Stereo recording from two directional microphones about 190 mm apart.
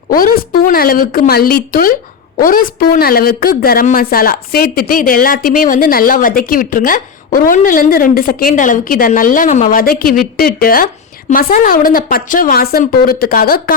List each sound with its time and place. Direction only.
0.1 s speech: 50° left (ahead or behind)